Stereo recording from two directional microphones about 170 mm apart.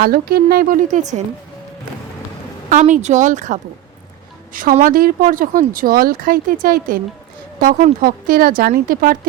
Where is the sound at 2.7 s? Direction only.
45° right (ahead or behind).